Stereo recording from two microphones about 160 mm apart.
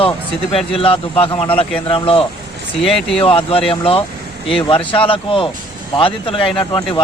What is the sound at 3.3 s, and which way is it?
A man's voice, 35° left (ahead or behind).